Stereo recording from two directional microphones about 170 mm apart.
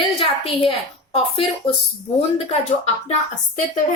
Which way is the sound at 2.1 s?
35° left (ahead or behind).